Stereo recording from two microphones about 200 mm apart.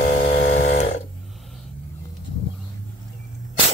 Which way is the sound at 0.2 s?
30° left (ahead or behind).